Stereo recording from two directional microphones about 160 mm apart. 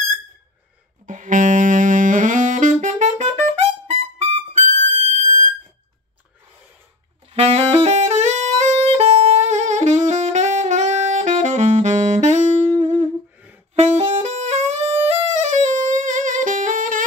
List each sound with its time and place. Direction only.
1.0 s saxophone: 50° right (ahead or behind)
3.8 s music: 45° right (ahead or behind)
4.9 s fire alarm: 45° right (ahead or behind)
7.3 s saxophone: 40° right (ahead or behind)
15.0 s music: 45° right (ahead or behind)